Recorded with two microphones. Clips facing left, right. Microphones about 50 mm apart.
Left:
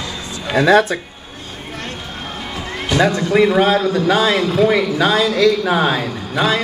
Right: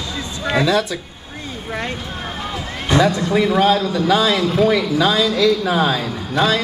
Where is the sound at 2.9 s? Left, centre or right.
Left.